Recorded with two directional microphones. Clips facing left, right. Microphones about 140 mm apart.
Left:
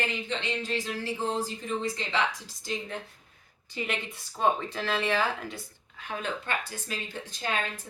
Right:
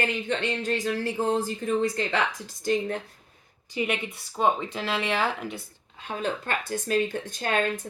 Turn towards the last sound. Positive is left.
turn(degrees=-50)  # may be behind; listen again after turning